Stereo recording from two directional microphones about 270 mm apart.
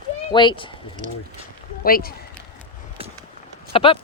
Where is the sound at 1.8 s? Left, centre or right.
Left.